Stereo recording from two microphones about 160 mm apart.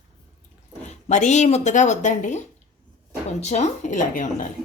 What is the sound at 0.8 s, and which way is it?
Speech, 45° left (ahead or behind).